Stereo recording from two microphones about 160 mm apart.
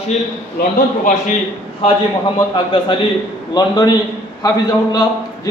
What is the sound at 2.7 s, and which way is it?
A man's voice, 30° left (ahead or behind).